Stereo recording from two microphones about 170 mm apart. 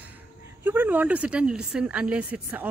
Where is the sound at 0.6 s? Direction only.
10° right (ahead or behind).